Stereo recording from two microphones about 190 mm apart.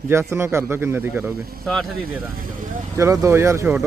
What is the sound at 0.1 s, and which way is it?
Speech, 15° right (ahead or behind).